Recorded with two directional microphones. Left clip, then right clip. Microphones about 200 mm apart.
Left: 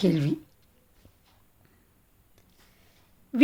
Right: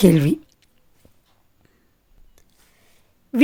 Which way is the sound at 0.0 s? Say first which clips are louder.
Right 10 dB; 40° right (ahead or behind).